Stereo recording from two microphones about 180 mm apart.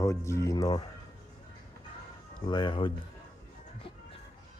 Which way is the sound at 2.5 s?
25° left (ahead or behind).